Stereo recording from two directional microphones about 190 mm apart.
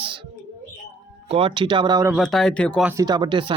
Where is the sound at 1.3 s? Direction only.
30° right (ahead or behind).